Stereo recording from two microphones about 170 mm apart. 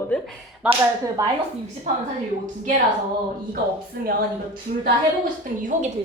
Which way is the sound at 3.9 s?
65° right (ahead or behind).